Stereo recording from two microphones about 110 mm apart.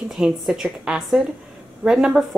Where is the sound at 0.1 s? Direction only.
5° right (ahead or behind).